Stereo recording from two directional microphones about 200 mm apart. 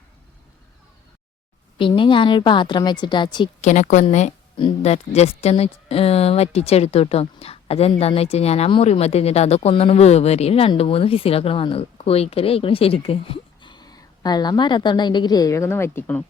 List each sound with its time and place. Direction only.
1.8 s a woman's voice: 25° left (ahead or behind)
3.6 s a woman's voice: 35° left (ahead or behind); by 16.2 s 10° left (ahead or behind)